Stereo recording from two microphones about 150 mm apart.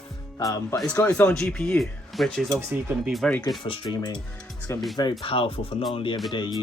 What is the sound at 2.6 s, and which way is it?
Speech, 15° right (ahead or behind).